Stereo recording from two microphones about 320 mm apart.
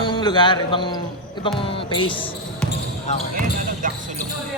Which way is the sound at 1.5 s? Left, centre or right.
Centre.